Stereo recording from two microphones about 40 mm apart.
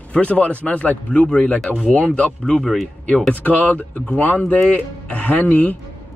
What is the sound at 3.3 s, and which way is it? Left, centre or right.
A man's voice, left.